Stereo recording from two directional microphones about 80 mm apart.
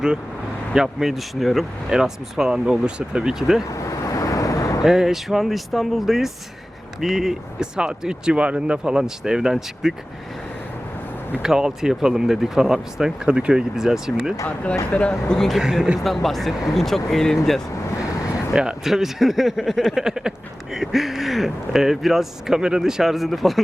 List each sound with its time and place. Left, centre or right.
0.7 s speech: centre
3.7 s vehicle: left
4.8 s speech: centre
11.4 s speech: centre
14.4 s speech: centre
15.6 s speech: centre
18.5 s speech: centre